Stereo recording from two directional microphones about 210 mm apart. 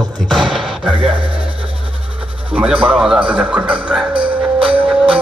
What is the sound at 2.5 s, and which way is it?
Speech, 5° right (ahead or behind).